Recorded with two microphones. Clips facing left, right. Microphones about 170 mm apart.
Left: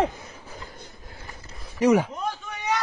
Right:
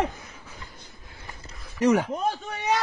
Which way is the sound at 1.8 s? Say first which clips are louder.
Left 2 dB; 10° left (ahead or behind).